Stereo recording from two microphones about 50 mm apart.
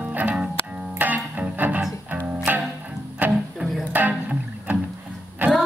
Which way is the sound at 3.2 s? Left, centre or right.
Right.